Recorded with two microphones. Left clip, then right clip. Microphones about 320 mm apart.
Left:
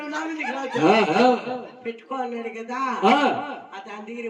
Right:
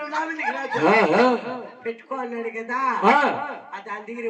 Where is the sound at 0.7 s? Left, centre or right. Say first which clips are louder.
Even; right.